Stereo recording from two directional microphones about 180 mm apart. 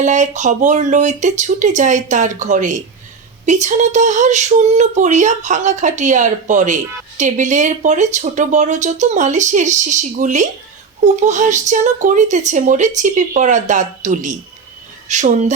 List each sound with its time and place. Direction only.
0.0 s speech: 40° right (ahead or behind)